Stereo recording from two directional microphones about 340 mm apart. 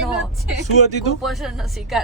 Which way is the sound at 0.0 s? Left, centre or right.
Centre.